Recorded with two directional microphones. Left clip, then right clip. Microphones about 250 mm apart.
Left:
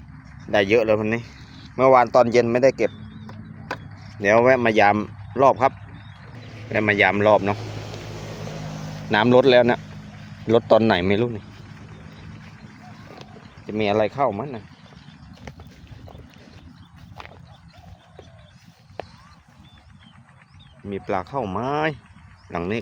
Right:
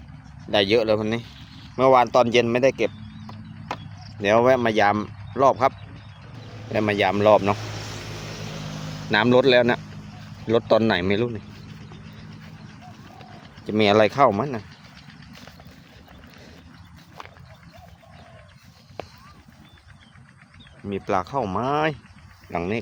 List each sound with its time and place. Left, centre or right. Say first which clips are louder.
0.5 s speech: left 1 dB; centre
2.8 s a sound: left 2 dB; centre
4.2 s speech: left 2 dB; centre
6.7 s speech: left 3 dB; centre
8.2 s vehicle: even; centre
9.0 s speech: left 2 dB; centre
13.7 s speech: right 3 dB; centre
17.2 s a sound: left 1 dB; centre
19.0 s clip-clop: left 1 dB; centre
20.9 s speech: right 2 dB; centre